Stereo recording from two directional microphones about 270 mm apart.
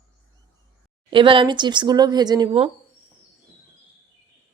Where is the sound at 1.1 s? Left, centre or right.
Centre.